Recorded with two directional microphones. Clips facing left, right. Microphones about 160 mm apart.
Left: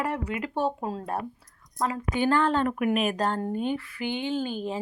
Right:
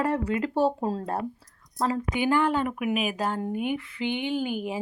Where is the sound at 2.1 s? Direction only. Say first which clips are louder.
Left 2 dB; 15° right (ahead or behind).